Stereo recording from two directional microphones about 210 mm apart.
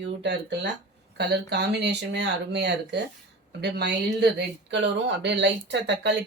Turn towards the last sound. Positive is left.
turn(degrees=-55)  # may be behind; listen again after turning